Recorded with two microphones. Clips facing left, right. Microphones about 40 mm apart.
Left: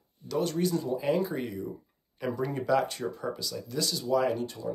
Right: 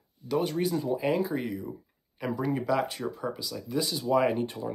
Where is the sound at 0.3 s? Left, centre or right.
Centre.